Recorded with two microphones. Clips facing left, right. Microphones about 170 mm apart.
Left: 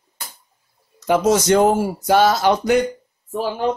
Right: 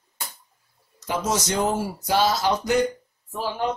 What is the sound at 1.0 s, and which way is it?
Speech, 60° left (ahead or behind).